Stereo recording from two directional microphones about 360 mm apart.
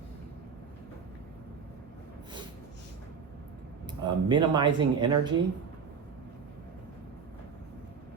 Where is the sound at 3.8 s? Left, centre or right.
Centre.